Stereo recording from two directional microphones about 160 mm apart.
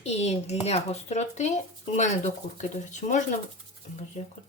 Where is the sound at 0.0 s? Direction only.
40° left (ahead or behind).